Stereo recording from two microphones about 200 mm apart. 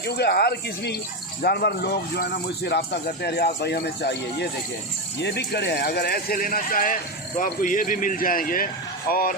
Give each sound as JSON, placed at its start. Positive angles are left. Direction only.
{"t": 0.1, "sound": "a man's voice", "side_deg": 55}